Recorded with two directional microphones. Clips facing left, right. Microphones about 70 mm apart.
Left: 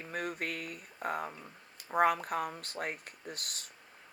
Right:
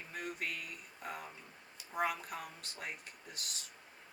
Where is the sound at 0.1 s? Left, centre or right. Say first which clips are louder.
Left 5 dB; left.